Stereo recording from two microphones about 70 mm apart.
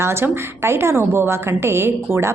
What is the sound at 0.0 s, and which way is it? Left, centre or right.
Speech, right.